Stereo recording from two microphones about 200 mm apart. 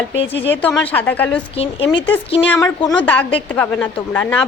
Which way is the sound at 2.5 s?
15° left (ahead or behind).